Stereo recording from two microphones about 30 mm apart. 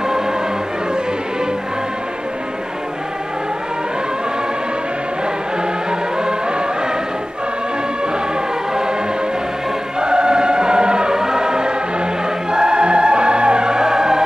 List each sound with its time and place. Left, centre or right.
9.9 s choir: right
12.4 s music: right